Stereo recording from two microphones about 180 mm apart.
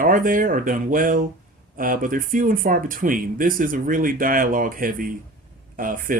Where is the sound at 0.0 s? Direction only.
50° right (ahead or behind).